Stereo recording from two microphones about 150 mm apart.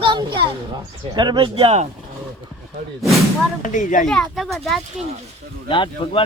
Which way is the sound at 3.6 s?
60° left (ahead or behind).